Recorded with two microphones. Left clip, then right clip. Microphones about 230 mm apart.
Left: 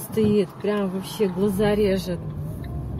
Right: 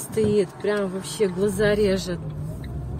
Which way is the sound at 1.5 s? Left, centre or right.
Centre.